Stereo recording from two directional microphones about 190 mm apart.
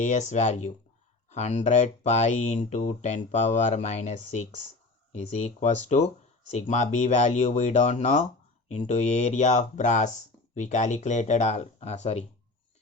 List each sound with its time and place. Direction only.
0.0 s speech: 40° left (ahead or behind)